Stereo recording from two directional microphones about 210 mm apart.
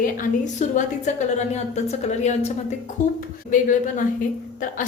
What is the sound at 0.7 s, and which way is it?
A woman's voice, 35° left (ahead or behind).